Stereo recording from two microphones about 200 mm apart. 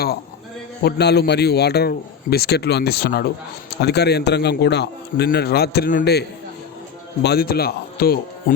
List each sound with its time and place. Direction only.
0.8 s a man's voice: 55° left (ahead or behind)